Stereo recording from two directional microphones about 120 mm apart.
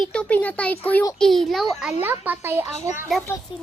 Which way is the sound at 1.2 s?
Centre (ahead or behind).